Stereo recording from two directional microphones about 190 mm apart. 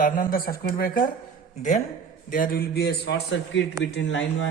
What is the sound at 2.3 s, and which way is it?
A man's voice, 50° left (ahead or behind).